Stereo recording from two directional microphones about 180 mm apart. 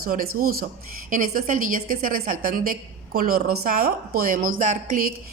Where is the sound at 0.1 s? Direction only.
50° right (ahead or behind).